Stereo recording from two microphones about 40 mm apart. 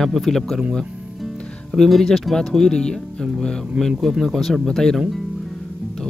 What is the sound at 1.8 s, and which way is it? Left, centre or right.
Speech, centre.